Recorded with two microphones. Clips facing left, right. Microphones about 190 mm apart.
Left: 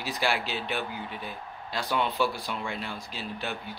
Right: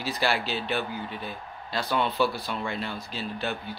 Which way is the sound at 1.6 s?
15° left (ahead or behind).